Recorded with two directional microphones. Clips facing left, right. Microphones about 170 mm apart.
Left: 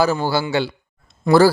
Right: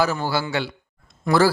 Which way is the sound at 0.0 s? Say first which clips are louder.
Left 4 dB; 30° left (ahead or behind).